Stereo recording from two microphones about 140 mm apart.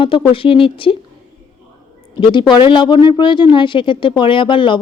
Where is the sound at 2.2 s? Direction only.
35° left (ahead or behind).